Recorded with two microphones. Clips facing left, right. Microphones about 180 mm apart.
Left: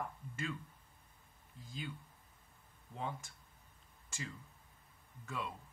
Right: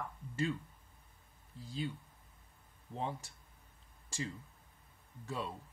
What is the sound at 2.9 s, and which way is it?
Speech, 30° right (ahead or behind).